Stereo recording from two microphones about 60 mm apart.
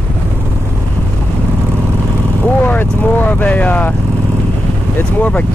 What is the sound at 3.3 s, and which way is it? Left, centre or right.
Speech, left.